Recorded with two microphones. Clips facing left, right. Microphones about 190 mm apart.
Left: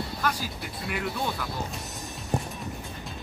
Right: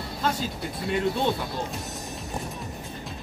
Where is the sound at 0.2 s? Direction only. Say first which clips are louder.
Right 5 dB; 25° right (ahead or behind).